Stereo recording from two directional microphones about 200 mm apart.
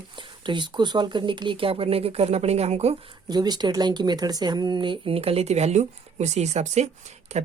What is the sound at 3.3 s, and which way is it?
Speech, 20° right (ahead or behind).